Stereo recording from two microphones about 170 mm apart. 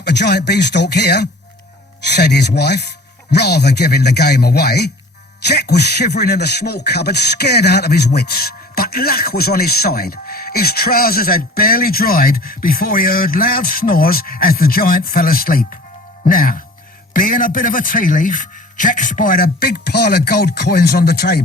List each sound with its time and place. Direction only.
0.0 s speech: 75° left (ahead or behind)